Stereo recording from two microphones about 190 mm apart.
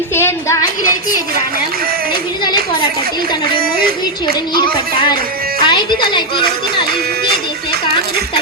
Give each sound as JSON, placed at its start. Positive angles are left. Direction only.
{"t": 0.1, "sound": "a woman's voice", "side_deg": 10}
{"t": 2.4, "sound": "a woman's voice", "side_deg": 25}
{"t": 3.6, "sound": "music", "side_deg": -50}
{"t": 5.6, "sound": "a woman's voice", "side_deg": 25}